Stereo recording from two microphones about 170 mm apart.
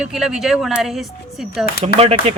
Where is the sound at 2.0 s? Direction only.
35° right (ahead or behind).